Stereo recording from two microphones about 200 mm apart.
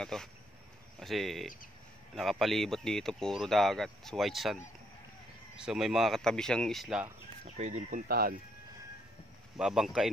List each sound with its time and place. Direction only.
0.0 s speech: 5° left (ahead or behind)
5.7 s speech: centre (ahead or behind)
7.4 s speech: 35° right (ahead or behind)
8.1 s speech: 50° right (ahead or behind)
9.6 s speech: centre (ahead or behind)